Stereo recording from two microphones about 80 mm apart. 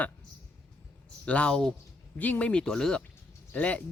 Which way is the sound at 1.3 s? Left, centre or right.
Centre.